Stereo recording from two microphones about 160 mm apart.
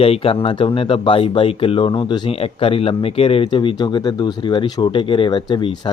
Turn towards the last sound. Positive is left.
turn(degrees=30)  # may be behind; listen again after turning